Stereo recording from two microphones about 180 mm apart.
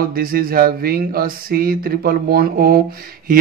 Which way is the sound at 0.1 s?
55° right (ahead or behind).